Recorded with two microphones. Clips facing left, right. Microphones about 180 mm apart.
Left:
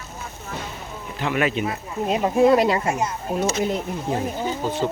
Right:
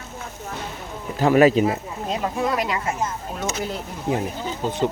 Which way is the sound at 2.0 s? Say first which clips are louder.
Left 7 dB; 15° left (ahead or behind).